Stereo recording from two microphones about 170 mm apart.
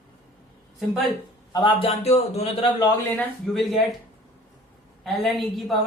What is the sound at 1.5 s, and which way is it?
Speech, 30° left (ahead or behind).